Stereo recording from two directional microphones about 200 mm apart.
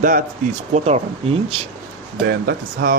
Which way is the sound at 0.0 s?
45° right (ahead or behind).